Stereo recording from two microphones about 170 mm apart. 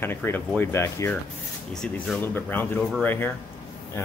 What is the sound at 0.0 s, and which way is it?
Speech, 10° left (ahead or behind).